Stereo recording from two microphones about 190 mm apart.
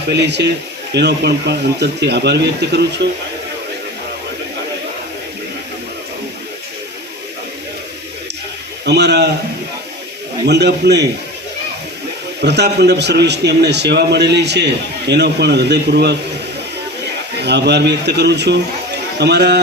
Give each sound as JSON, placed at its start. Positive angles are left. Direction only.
{"t": 0.1, "sound": "a man's voice", "side_deg": -65}
{"t": 8.8, "sound": "a man's voice", "side_deg": -60}
{"t": 10.4, "sound": "a man's voice", "side_deg": -60}
{"t": 12.4, "sound": "a man's voice", "side_deg": -60}
{"t": 17.3, "sound": "a man's voice", "side_deg": -60}